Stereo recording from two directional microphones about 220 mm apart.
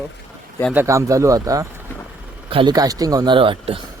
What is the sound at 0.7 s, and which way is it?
A man's voice, 15° right (ahead or behind).